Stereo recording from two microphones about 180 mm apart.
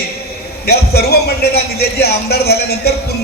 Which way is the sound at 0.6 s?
60° left (ahead or behind).